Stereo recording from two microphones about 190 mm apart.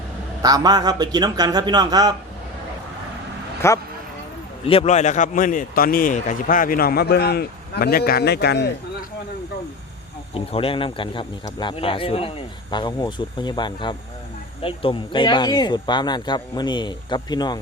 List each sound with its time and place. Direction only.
0.4 s a man's voice: 20° right (ahead or behind)
3.6 s speech: 15° left (ahead or behind)
4.6 s a man's voice: 30° left (ahead or behind); by 8.7 s 60° left (ahead or behind)
10.3 s speech: 30° left (ahead or behind)